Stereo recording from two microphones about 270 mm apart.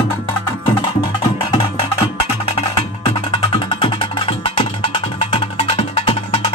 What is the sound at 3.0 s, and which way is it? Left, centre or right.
Music, centre.